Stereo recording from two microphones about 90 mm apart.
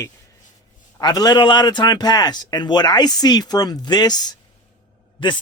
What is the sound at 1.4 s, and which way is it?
Speech, 60° left (ahead or behind).